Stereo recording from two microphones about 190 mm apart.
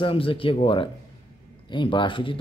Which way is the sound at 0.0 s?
30° left (ahead or behind).